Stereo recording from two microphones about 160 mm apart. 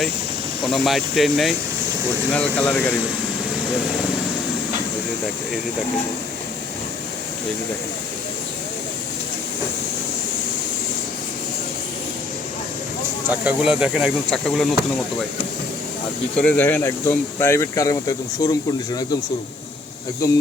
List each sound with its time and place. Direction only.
0.6 s speech: centre (ahead or behind)
13.2 s speech: 10° right (ahead or behind)
16.4 s speech: 10° left (ahead or behind)